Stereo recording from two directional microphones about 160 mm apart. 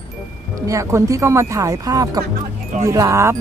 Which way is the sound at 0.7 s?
20° right (ahead or behind).